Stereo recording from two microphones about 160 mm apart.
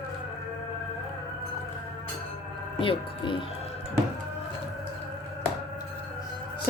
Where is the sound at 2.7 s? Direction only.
30° left (ahead or behind).